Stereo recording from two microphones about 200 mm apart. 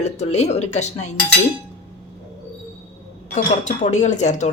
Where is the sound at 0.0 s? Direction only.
35° left (ahead or behind).